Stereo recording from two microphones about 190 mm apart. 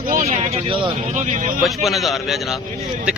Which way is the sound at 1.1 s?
40° right (ahead or behind).